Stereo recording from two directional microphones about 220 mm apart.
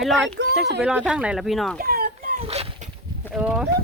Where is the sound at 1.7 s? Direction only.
40° right (ahead or behind).